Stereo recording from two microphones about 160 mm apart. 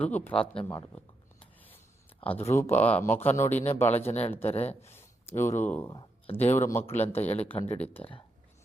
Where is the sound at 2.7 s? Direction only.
10° left (ahead or behind).